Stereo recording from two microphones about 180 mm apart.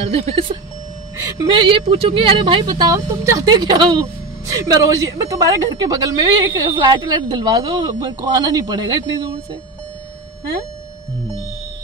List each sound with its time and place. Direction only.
0.1 s speech: 30° right (ahead or behind)